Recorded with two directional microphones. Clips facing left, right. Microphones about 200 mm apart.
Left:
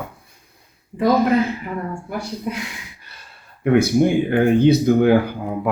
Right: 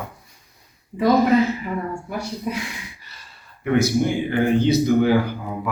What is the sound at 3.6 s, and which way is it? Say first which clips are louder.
Speech: left 4 dB; 55° left (ahead or behind).